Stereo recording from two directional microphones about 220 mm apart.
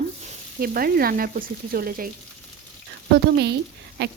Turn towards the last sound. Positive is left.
turn(degrees=-45)  # may be behind; listen again after turning